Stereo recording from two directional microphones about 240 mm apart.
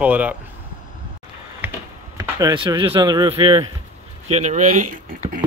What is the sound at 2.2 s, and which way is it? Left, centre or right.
Speech, centre.